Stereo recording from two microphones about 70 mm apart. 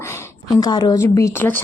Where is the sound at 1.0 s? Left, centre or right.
Left.